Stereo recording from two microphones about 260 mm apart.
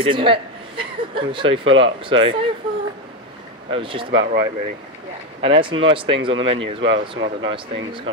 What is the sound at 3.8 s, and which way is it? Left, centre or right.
Speech, centre.